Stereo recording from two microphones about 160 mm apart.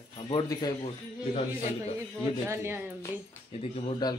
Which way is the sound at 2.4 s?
15° right (ahead or behind).